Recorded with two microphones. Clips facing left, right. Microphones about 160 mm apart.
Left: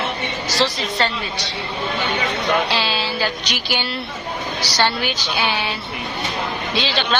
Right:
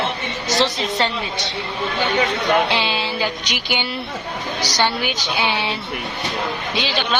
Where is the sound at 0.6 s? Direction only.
20° right (ahead or behind).